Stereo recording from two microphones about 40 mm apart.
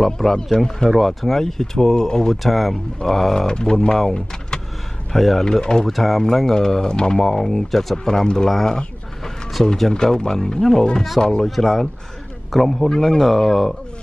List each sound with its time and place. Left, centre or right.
0.0 s speech: centre
2.4 s speech: centre
3.0 s speech: centre
5.1 s speech: centre
5.4 s speech: centre
5.9 s speech: centre
8.6 s a sound: centre
9.8 s speech: centre
11.4 s speech: centre